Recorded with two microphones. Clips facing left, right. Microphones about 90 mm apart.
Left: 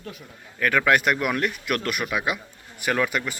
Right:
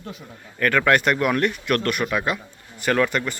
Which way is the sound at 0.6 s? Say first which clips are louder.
Right 2 dB; 5° left (ahead or behind).